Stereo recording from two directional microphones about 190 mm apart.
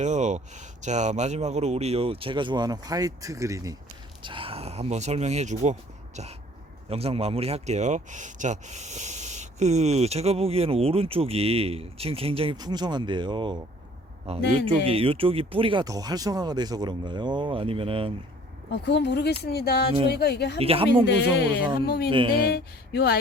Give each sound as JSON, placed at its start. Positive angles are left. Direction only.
{"t": 0.0, "sound": "speech", "side_deg": -40}
{"t": 6.9, "sound": "speech", "side_deg": -30}
{"t": 18.7, "sound": "speech", "side_deg": 65}
{"t": 20.6, "sound": "speech", "side_deg": -30}
{"t": 21.1, "sound": "speech", "side_deg": 60}
{"t": 22.1, "sound": "speech", "side_deg": -25}
{"t": 22.4, "sound": "speech", "side_deg": 55}